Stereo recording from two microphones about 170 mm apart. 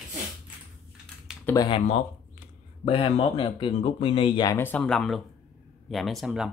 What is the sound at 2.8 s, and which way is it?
Speech, 35° left (ahead or behind).